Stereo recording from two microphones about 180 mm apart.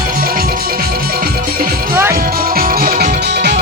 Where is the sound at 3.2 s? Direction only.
70° right (ahead or behind).